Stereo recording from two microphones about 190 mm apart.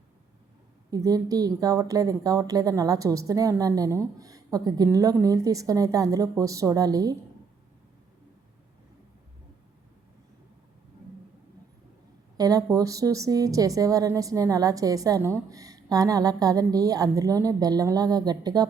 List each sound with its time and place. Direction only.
0.9 s a woman's voice: 20° right (ahead or behind)
12.4 s a woman's voice: 20° right (ahead or behind)